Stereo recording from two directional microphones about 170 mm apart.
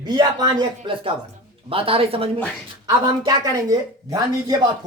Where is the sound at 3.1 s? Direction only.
20° right (ahead or behind).